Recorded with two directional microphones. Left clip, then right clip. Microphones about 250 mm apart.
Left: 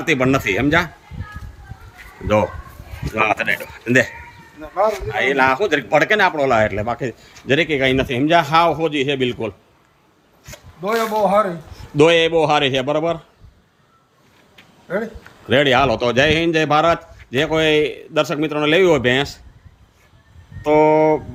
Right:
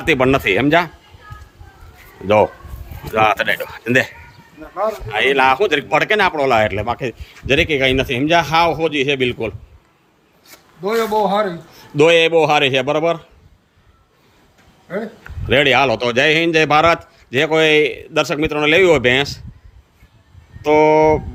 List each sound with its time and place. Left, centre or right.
0.0 s speech: centre
2.2 s a man's voice: centre
4.7 s a man's voice: left
5.0 s a man's voice: centre
10.8 s a man's voice: centre
11.7 s a man's voice: centre
15.4 s a man's voice: centre
20.6 s a man's voice: centre